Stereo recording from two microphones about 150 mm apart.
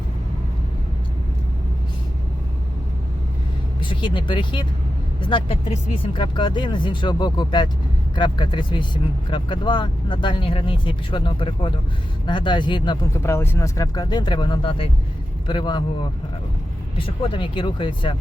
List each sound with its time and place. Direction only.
3.8 s speech: 35° left (ahead or behind)
13.2 s speech: 15° left (ahead or behind); by 15.8 s 30° left (ahead or behind)
17.0 s speech: 35° left (ahead or behind)